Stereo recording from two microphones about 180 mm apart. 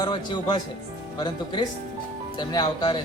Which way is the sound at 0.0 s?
25° left (ahead or behind).